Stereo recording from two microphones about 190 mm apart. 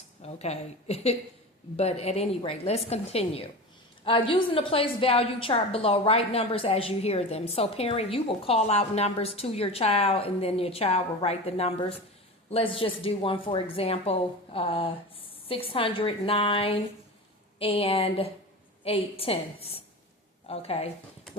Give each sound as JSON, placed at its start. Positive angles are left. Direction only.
{"t": 0.2, "sound": "a woman's voice", "side_deg": 35}